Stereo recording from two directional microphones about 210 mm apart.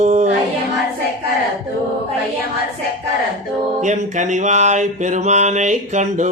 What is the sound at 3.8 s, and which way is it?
Mantra, 35° right (ahead or behind).